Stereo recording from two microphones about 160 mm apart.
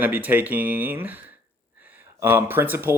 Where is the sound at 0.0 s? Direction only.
10° right (ahead or behind).